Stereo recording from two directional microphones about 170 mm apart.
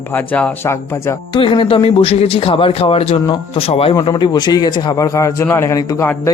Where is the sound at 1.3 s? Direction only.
30° left (ahead or behind).